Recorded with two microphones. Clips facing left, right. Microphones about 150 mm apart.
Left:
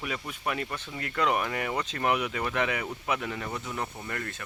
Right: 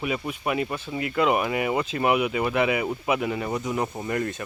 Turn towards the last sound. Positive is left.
turn(degrees=-20)  # may be behind; listen again after turning